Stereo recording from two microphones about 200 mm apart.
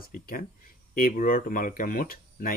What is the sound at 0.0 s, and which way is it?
Speech, 45° left (ahead or behind).